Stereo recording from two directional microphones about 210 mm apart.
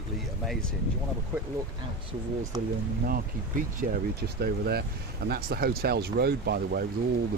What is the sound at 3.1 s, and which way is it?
Speech, 40° right (ahead or behind).